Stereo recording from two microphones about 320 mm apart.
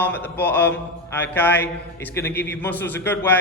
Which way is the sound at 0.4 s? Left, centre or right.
Centre.